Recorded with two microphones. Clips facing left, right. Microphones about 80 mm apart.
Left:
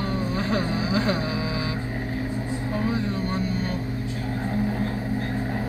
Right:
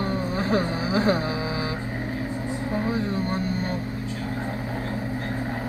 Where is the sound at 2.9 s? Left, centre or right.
Right.